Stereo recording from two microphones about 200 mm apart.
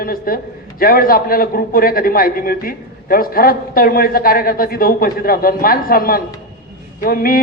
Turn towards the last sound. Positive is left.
turn(degrees=45)  # may be behind; listen again after turning